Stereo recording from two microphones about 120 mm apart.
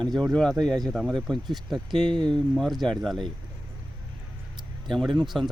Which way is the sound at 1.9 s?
40° right (ahead or behind).